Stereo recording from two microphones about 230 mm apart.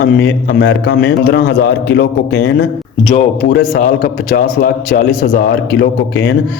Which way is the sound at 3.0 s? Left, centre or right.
Left.